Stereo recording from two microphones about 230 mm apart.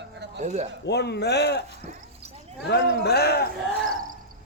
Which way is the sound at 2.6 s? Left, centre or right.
Left.